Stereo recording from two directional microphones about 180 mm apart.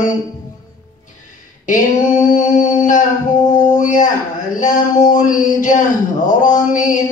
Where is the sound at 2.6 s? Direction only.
45° left (ahead or behind).